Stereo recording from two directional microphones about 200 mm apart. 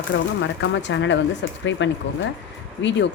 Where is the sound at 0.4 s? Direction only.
65° left (ahead or behind).